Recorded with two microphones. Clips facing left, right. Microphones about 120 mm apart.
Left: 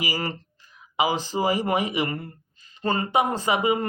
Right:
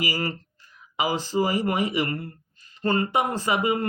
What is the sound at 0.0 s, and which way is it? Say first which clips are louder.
Mantra: right 1 dB; 20° left (ahead or behind).